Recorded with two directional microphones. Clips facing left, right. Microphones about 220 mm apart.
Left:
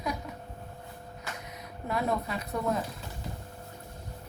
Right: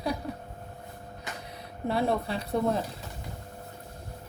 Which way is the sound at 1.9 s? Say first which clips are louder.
Right 3 dB; 30° right (ahead or behind).